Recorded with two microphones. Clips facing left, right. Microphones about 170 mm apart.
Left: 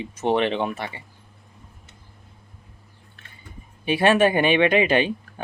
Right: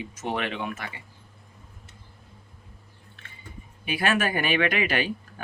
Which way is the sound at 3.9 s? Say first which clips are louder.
Left 8 dB; 25° left (ahead or behind).